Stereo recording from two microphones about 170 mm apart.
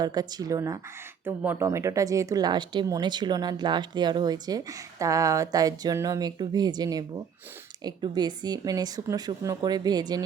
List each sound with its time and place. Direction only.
0.0 s speech: 25° right (ahead or behind)